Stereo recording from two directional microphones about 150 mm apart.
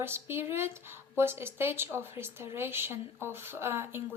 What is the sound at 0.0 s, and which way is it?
Speech, 15° right (ahead or behind).